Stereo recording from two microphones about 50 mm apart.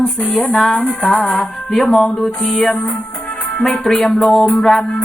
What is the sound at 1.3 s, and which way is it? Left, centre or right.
Female singing, centre.